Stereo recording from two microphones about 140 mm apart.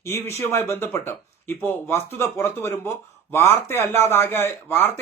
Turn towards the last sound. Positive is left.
turn(degrees=15)  # may be behind; listen again after turning